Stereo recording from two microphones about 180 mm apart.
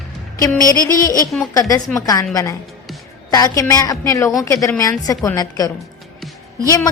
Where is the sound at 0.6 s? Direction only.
20° left (ahead or behind).